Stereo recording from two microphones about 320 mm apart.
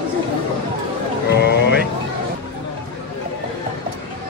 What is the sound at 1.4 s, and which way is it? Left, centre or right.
Frog, left.